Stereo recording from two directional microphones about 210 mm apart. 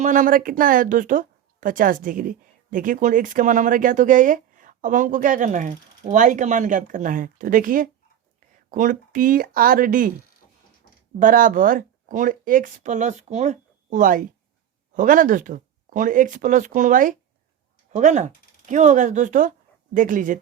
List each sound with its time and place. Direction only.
0.0 s speech: 40° right (ahead or behind)
11.2 s speech: 40° right (ahead or behind)